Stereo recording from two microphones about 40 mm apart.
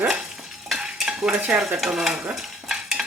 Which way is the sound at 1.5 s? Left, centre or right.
Centre.